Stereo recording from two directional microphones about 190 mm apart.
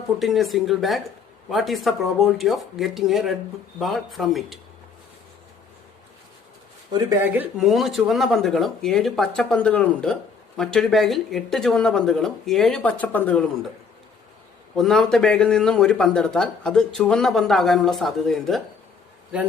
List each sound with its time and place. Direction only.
0.2 s speech: centre (ahead or behind)
7.3 s speech: centre (ahead or behind)
14.8 s speech: centre (ahead or behind)